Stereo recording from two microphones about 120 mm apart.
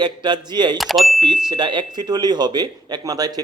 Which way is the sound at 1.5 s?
40° right (ahead or behind).